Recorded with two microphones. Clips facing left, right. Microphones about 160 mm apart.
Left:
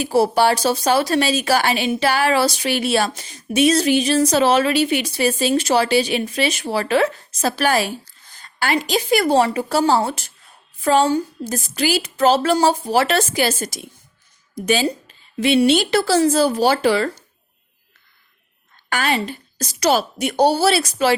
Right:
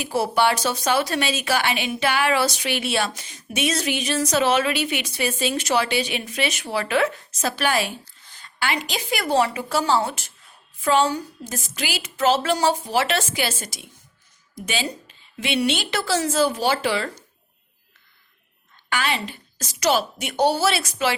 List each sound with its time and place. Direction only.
0.0 s a woman's voice: 35° left (ahead or behind)
18.9 s a woman's voice: 45° left (ahead or behind)